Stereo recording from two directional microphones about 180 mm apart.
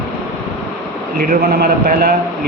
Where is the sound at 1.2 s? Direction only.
55° right (ahead or behind).